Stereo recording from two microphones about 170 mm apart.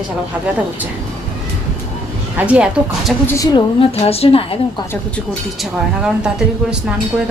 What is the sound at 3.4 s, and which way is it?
A woman's voice, 30° left (ahead or behind).